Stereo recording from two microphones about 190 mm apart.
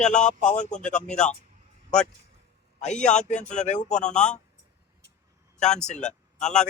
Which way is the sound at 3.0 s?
40° left (ahead or behind).